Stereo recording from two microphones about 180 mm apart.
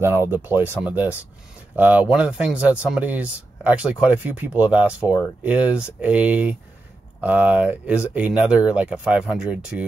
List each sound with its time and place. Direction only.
0.0 s speech: 10° right (ahead or behind)